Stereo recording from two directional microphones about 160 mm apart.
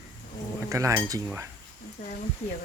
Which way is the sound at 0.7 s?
20° right (ahead or behind).